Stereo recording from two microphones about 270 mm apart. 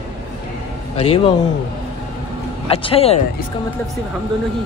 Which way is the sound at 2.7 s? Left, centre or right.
Left.